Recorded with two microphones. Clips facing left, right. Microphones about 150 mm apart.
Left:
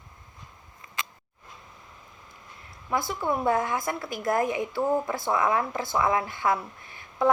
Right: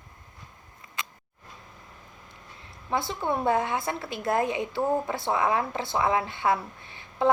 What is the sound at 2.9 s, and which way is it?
Speech, 25° right (ahead or behind).